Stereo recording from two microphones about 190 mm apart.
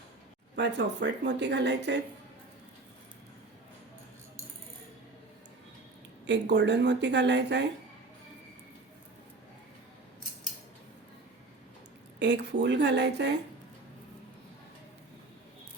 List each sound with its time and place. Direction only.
0.5 s speech: 65° right (ahead or behind)
6.2 s speech: 65° right (ahead or behind)
12.2 s speech: 65° right (ahead or behind)